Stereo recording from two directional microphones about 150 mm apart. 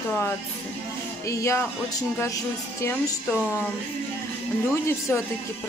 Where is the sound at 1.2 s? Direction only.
20° left (ahead or behind).